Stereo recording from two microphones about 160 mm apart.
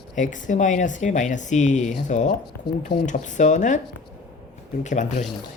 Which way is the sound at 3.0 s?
50° left (ahead or behind).